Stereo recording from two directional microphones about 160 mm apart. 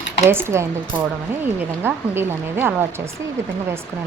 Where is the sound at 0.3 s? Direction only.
15° right (ahead or behind).